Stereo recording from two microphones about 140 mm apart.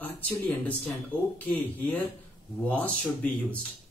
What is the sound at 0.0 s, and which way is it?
Speech, 10° left (ahead or behind).